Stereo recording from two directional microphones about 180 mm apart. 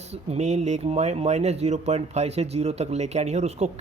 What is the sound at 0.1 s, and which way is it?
Speech, 35° right (ahead or behind).